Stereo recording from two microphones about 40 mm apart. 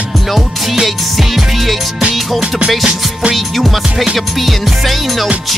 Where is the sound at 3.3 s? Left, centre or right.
Centre.